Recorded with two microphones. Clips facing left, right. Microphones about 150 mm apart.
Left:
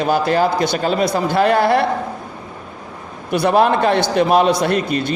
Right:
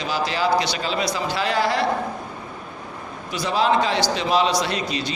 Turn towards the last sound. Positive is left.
turn(degrees=55)  # may be behind; listen again after turning